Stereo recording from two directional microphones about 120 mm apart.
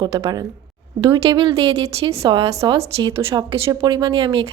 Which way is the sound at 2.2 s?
50° right (ahead or behind).